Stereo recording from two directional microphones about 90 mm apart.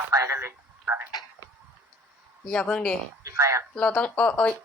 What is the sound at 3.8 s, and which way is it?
Speech, 10° left (ahead or behind).